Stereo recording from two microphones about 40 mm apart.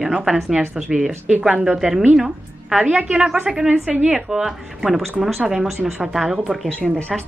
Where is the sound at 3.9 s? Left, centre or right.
Right.